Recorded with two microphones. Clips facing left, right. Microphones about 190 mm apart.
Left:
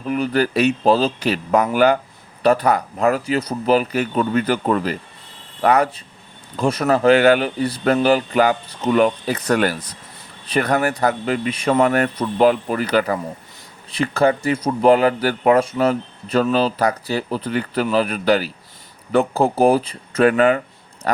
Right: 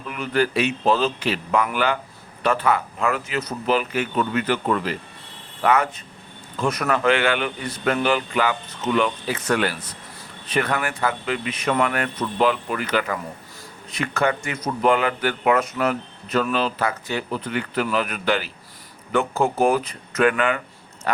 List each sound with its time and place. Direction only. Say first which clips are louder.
0.0 s speech: left 4 dB; 40° left (ahead or behind)